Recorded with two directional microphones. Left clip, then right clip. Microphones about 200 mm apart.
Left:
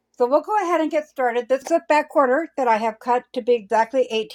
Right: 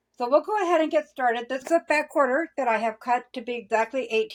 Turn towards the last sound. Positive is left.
turn(degrees=45)  # may be behind; listen again after turning